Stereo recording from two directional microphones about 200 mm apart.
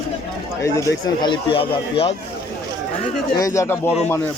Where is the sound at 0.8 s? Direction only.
20° left (ahead or behind).